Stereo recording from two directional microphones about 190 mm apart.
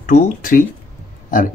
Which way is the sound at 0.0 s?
45° left (ahead or behind).